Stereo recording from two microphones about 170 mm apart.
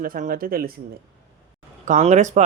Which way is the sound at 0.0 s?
55° right (ahead or behind).